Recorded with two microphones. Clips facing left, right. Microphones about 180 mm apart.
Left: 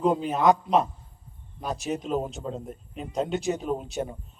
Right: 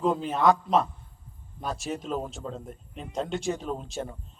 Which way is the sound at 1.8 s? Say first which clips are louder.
Left 5 dB; centre (ahead or behind).